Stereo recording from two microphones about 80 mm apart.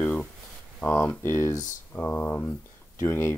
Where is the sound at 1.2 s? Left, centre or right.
Left.